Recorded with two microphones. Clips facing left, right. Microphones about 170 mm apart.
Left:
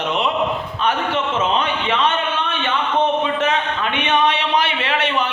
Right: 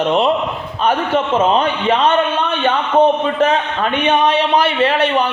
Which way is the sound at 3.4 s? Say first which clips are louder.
Right 5 dB; 35° right (ahead or behind).